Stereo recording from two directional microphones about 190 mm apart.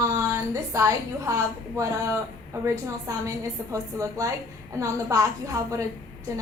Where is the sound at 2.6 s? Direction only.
15° right (ahead or behind).